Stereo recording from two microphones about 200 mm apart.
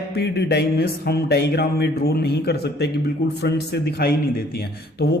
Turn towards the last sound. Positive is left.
turn(degrees=50)  # may be behind; listen again after turning